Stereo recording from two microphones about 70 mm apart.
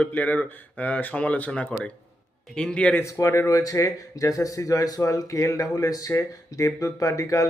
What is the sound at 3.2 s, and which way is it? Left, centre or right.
Speech, left.